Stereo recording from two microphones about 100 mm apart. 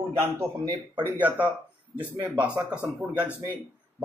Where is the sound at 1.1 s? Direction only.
15° right (ahead or behind).